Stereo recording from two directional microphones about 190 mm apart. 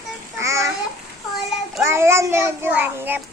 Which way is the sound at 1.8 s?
15° right (ahead or behind).